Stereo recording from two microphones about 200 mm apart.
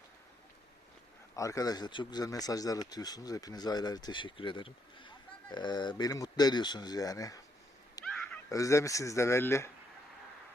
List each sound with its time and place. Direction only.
1.4 s speech: 15° left (ahead or behind)
8.0 s a sound: 20° left (ahead or behind)
8.3 s speech: 15° left (ahead or behind)